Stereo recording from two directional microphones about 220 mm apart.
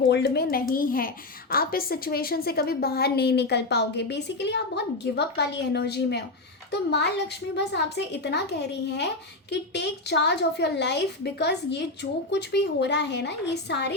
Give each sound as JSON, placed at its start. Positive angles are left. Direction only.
{"t": 0.1, "sound": "a woman's voice", "side_deg": 50}